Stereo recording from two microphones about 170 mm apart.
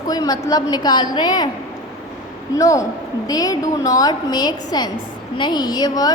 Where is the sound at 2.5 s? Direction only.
20° left (ahead or behind).